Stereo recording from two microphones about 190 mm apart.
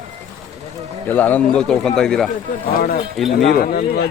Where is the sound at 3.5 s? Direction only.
50° left (ahead or behind).